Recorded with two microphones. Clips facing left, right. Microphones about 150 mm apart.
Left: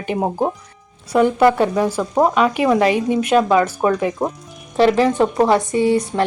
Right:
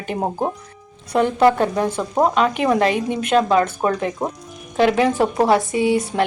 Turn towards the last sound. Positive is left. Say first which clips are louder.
# left 2 dB
turn(degrees=0)  # may be behind; listen again after turning